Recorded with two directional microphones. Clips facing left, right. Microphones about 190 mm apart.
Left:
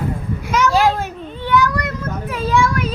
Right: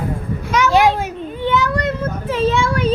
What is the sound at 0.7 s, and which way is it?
Speech, 15° right (ahead or behind).